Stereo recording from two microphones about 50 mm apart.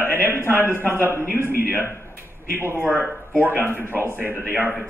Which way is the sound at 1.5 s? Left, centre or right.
Right.